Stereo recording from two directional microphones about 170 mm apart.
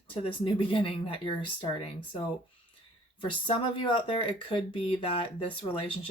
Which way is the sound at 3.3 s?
30° left (ahead or behind).